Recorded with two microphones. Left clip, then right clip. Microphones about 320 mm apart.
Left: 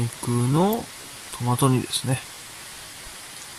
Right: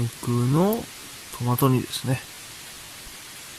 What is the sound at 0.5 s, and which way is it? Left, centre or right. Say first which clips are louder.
Speech: left 1 dB; centre.